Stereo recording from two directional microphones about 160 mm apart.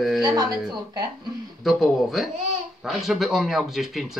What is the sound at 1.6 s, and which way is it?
Speech, centre (ahead or behind).